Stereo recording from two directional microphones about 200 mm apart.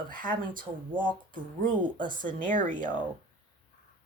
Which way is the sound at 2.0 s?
40° right (ahead or behind).